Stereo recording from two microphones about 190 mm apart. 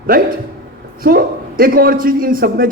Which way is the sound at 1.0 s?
50° right (ahead or behind).